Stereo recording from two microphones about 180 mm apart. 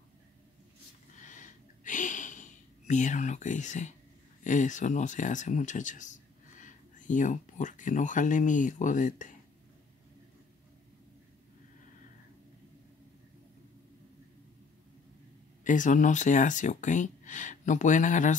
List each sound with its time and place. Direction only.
1.2 s a sound: 45° left (ahead or behind)
2.9 s speech: 45° left (ahead or behind)
15.6 s speech: 45° left (ahead or behind)